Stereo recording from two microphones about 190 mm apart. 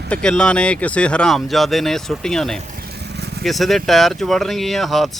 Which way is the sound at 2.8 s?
60° right (ahead or behind).